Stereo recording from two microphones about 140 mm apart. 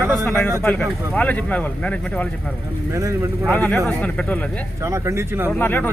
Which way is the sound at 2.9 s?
20° right (ahead or behind).